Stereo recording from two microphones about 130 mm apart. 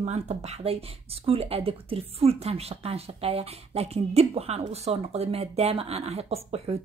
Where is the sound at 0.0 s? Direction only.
60° right (ahead or behind).